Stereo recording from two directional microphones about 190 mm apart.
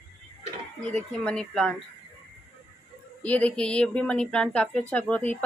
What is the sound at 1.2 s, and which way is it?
Speech, 5° left (ahead or behind).